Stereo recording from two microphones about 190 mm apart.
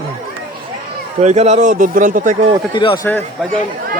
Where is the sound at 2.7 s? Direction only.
25° left (ahead or behind).